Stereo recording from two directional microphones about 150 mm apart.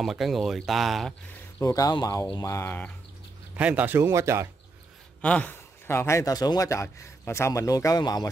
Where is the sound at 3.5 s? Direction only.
10° right (ahead or behind).